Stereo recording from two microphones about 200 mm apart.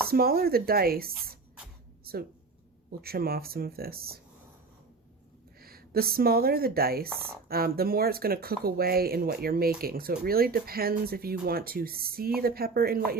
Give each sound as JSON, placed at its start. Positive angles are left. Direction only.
{"t": 0.1, "sound": "speech", "side_deg": -50}
{"t": 3.0, "sound": "speech", "side_deg": -50}
{"t": 5.5, "sound": "a woman's voice", "side_deg": -50}